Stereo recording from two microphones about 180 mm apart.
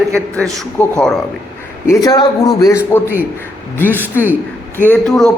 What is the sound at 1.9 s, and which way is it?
A man's voice, 20° left (ahead or behind).